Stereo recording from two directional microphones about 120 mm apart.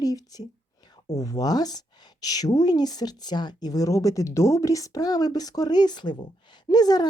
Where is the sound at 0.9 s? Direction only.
30° left (ahead or behind).